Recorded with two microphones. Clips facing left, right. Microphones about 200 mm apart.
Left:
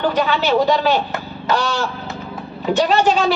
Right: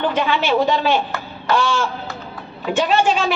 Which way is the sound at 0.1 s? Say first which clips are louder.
Left 1 dB; 40° left (ahead or behind).